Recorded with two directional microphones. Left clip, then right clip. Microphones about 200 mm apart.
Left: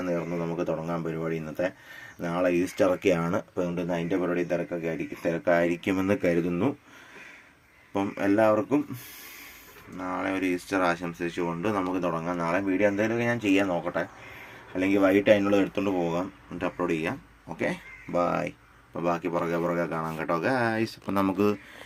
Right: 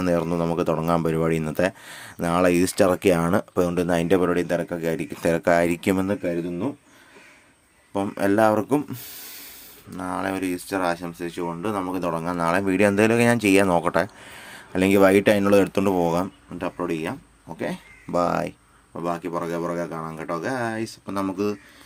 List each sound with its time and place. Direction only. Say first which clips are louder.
0.0 s speech: right 7 dB; 45° right (ahead or behind); by 6.1 s 30° right (ahead or behind)
7.9 s speech: right 3 dB; 20° right (ahead or behind)
10.0 s speech: right 2 dB; 25° right (ahead or behind)
10.5 s speech: right 1 dB; 10° right (ahead or behind); by 16.2 s 35° right (ahead or behind)
16.6 s speech: right 1 dB; 15° right (ahead or behind)
18.1 s speech: right 4 dB; 20° right (ahead or behind)
18.9 s speech: even; 5° right (ahead or behind)